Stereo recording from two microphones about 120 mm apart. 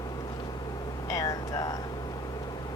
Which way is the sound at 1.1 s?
30° left (ahead or behind).